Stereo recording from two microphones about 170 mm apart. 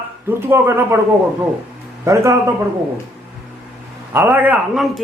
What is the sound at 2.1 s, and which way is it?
Speech, 15° right (ahead or behind).